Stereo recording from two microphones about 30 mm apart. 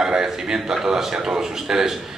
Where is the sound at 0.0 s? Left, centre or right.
Right.